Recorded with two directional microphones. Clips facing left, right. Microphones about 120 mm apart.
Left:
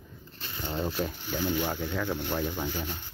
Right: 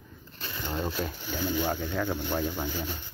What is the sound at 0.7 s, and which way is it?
Speech, 20° left (ahead or behind).